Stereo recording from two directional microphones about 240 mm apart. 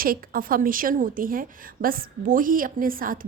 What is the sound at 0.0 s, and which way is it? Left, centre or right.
A woman's voice, right.